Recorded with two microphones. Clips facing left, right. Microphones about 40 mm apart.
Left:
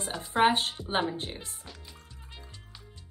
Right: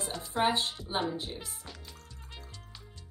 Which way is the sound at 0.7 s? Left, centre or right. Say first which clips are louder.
Left 3 dB; left.